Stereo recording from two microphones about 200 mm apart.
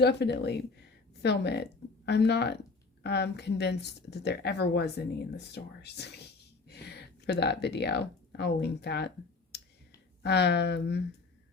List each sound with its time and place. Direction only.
0.0 s speech: 55° left (ahead or behind)